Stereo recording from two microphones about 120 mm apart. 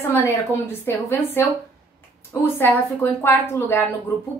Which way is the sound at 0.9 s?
20° left (ahead or behind).